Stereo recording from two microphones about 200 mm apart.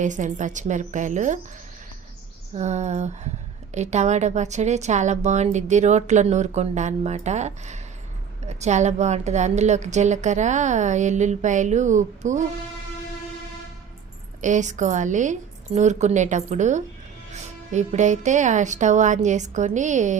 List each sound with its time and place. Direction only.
0.0 s a woman's voice: 40° right (ahead or behind)
2.6 s a woman's voice: 35° right (ahead or behind)
14.4 s a woman's voice: 40° right (ahead or behind)